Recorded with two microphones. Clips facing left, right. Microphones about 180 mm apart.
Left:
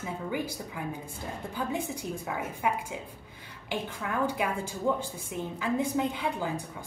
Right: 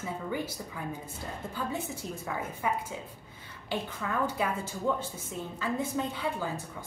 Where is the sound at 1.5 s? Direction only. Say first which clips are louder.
Left 3 dB; 15° left (ahead or behind).